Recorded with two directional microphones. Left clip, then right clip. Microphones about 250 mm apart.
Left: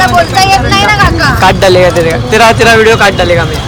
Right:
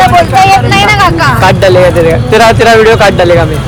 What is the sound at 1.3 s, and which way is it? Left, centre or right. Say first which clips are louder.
Speech: left 1 dB; centre.